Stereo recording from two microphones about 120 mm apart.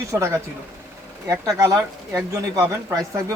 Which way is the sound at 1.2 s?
25° right (ahead or behind).